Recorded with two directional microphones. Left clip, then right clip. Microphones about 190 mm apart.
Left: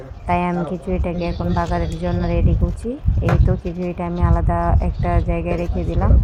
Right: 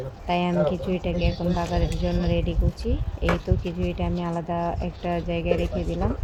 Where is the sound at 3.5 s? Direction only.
5° left (ahead or behind).